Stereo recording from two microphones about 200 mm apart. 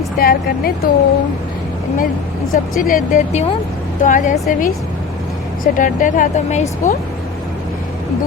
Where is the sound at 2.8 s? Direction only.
45° left (ahead or behind).